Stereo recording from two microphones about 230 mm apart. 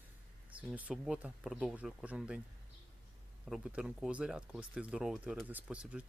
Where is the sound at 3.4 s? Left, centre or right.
Centre.